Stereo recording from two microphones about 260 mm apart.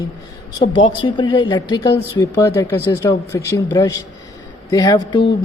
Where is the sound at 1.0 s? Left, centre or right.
Centre.